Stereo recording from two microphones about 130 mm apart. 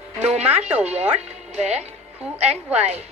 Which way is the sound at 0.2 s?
60° right (ahead or behind).